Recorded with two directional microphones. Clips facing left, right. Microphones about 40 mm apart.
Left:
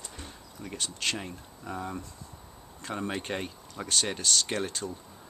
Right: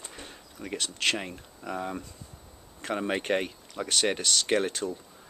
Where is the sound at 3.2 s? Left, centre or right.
Right.